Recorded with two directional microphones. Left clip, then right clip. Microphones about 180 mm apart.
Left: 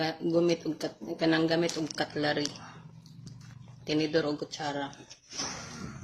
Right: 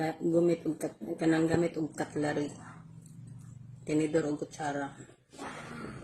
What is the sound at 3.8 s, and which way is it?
Speech, 10° right (ahead or behind).